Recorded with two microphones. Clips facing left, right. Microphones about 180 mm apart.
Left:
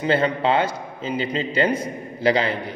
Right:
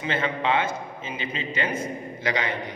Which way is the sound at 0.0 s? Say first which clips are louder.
Left 6 dB; 35° left (ahead or behind).